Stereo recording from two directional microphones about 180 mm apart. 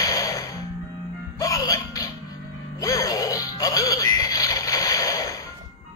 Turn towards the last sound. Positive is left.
turn(degrees=20)  # may be behind; listen again after turning